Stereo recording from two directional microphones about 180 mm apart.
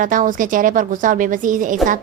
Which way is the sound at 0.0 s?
45° right (ahead or behind).